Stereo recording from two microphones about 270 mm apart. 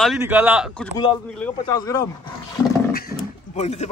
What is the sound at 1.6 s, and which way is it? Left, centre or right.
Speech, centre.